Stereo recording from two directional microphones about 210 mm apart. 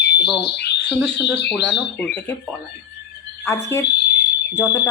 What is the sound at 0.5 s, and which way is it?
Speech, 55° left (ahead or behind).